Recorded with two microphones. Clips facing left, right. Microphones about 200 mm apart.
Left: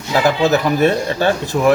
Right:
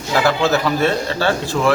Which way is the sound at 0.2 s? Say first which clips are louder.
Left 2 dB; 15° left (ahead or behind).